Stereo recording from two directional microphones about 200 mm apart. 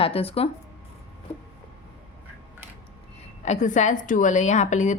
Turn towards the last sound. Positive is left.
turn(degrees=35)  # may be behind; listen again after turning